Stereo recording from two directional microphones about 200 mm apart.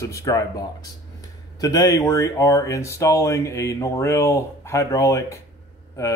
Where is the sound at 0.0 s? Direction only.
15° left (ahead or behind).